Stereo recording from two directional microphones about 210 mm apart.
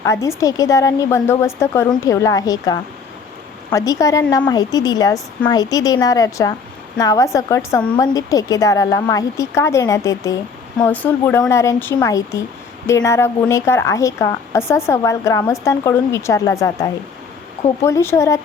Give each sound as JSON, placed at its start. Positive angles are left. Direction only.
{"t": 0.0, "sound": "a woman's voice", "side_deg": 15}